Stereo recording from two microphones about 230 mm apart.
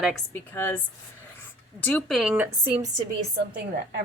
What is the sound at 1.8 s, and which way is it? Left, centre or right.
Speech, centre.